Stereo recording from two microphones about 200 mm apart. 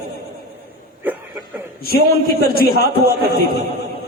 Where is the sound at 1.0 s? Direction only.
10° right (ahead or behind).